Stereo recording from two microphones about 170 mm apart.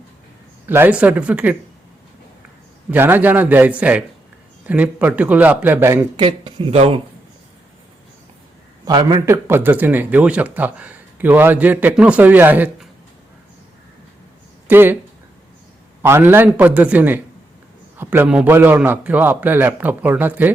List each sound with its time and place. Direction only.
0.7 s speech: 10° right (ahead or behind)
2.9 s speech: 10° right (ahead or behind)
6.1 s speech: 30° right (ahead or behind)
8.8 s a man's voice: 25° right (ahead or behind)
9.3 s speech: 10° right (ahead or behind)
14.7 s speech: 10° right (ahead or behind)
16.0 s speech: 15° right (ahead or behind)